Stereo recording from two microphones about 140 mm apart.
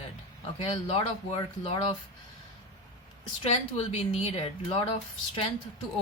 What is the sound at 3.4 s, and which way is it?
A woman's voice, 50° left (ahead or behind).